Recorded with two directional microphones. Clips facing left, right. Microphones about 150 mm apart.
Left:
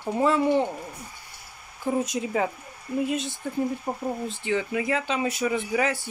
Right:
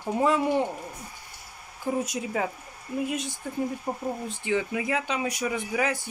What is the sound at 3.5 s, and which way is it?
Speech, centre (ahead or behind).